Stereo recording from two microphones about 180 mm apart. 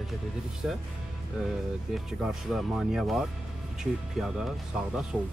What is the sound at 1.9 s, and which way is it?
Speech, centre (ahead or behind).